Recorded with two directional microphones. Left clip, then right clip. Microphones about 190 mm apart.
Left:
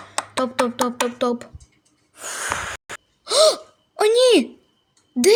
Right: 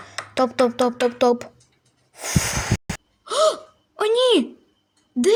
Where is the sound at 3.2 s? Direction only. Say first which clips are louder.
Left 3 dB; 15° left (ahead or behind).